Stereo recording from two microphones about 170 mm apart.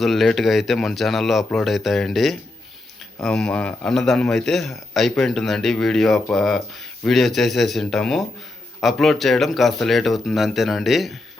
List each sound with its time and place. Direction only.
0.0 s a man's voice: centre (ahead or behind)